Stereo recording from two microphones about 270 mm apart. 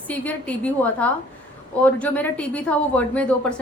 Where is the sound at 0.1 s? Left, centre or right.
Centre.